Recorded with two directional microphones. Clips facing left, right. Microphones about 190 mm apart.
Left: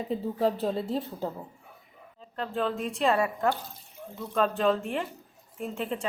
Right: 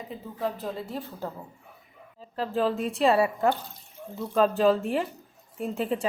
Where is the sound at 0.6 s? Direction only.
30° left (ahead or behind).